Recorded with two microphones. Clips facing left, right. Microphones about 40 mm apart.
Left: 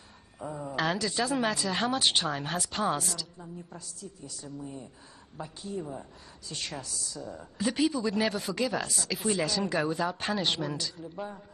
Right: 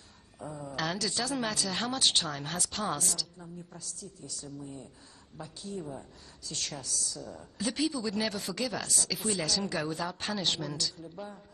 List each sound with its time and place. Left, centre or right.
0.4 s a woman's voice: centre